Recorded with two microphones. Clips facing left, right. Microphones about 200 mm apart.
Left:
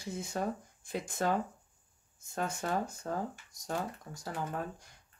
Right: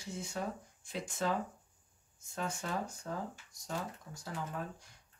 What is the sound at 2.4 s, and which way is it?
Speech, 50° left (ahead or behind).